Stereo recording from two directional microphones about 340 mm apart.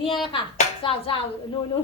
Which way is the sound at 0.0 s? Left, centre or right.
Centre.